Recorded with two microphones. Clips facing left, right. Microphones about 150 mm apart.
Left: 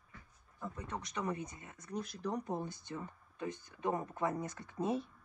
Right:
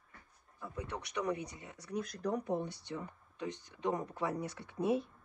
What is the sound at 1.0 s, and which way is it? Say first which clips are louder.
Speech: right 3 dB; 70° right (ahead or behind).